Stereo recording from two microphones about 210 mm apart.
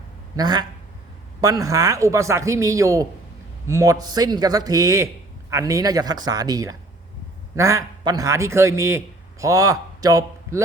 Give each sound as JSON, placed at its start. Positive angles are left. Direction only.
{"t": 0.3, "sound": "a man's voice", "side_deg": -20}